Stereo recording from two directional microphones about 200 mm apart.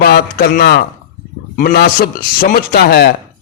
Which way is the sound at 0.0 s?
50° left (ahead or behind).